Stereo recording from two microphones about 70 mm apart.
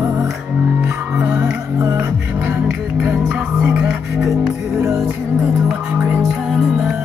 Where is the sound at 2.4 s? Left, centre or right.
Centre.